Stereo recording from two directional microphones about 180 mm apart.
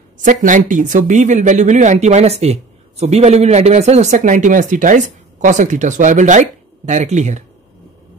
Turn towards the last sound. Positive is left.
turn(degrees=-40)  # may be behind; listen again after turning